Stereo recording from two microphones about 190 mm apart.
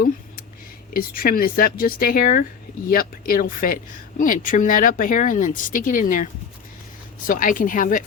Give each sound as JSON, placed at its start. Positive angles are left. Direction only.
{"t": 0.9, "sound": "speech", "side_deg": 50}
{"t": 7.3, "sound": "speech", "side_deg": 45}